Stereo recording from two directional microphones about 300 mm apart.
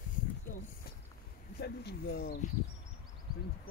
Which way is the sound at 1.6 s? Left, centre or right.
Left.